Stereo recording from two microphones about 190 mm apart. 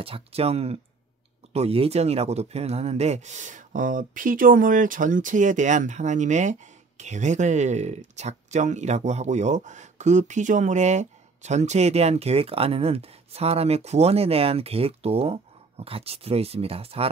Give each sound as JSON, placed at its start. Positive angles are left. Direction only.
{"t": 0.0, "sound": "speech", "side_deg": -30}